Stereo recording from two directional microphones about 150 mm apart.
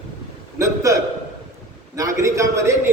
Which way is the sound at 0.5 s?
20° right (ahead or behind).